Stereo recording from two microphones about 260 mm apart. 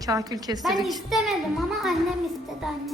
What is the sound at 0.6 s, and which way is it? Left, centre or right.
A woman's voice, centre.